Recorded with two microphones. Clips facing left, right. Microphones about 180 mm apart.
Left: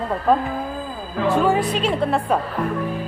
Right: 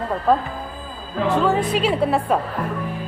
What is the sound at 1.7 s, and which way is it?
Speech, 5° right (ahead or behind).